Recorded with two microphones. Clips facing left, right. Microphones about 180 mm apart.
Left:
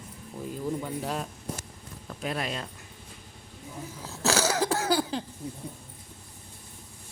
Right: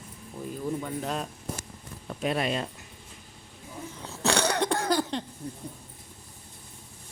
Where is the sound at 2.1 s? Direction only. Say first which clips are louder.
Right 4 dB; 5° right (ahead or behind).